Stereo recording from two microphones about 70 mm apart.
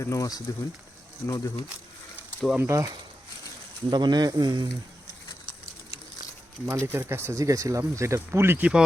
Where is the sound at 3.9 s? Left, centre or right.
Right.